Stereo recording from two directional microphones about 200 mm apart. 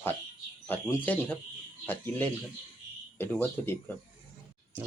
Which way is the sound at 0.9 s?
10° left (ahead or behind).